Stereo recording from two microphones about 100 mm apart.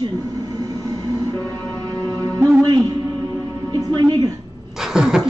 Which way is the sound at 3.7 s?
40° right (ahead or behind).